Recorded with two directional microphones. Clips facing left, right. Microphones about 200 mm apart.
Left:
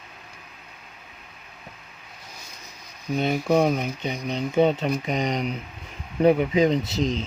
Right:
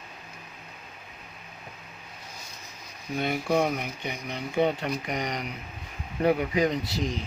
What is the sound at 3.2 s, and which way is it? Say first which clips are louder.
Speech: left 4 dB; 20° left (ahead or behind).